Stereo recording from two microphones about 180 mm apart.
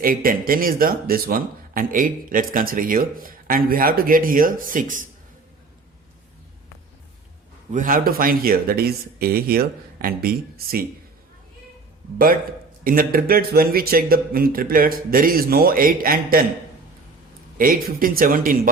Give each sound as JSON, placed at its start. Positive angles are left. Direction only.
{"t": 0.0, "sound": "speech", "side_deg": -50}
{"t": 7.7, "sound": "speech", "side_deg": -50}
{"t": 12.8, "sound": "speech", "side_deg": -55}
{"t": 17.6, "sound": "speech", "side_deg": -50}